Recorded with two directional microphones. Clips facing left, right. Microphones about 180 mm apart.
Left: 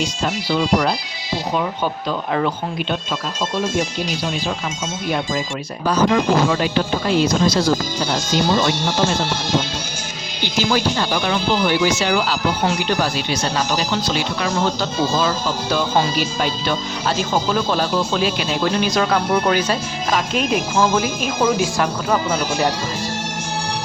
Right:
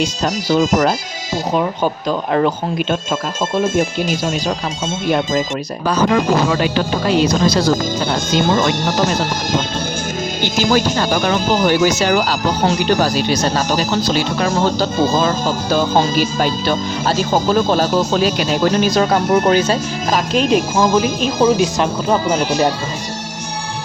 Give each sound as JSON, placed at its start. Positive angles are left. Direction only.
{"t": 0.0, "sound": "speech", "side_deg": -45}
{"t": 8.1, "sound": "speech", "side_deg": -50}
{"t": 10.4, "sound": "speech", "side_deg": -45}
{"t": 19.5, "sound": "speech", "side_deg": -25}